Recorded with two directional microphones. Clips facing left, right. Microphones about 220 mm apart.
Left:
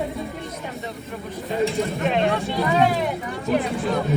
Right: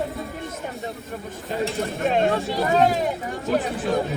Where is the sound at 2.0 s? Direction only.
45° right (ahead or behind).